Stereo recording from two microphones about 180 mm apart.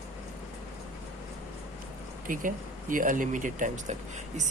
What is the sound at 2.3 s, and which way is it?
Speech, 50° right (ahead or behind).